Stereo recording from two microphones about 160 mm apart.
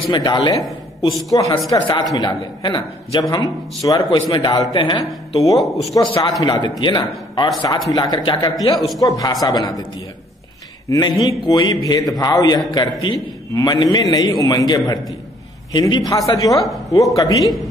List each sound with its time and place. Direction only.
0.1 s a man's voice: 30° left (ahead or behind)
8.7 s speech: centre (ahead or behind)
9.0 s a man's voice: 20° left (ahead or behind)
10.9 s a man's voice: 25° left (ahead or behind)
16.6 s speech: centre (ahead or behind)
17.1 s a man's voice: 20° left (ahead or behind)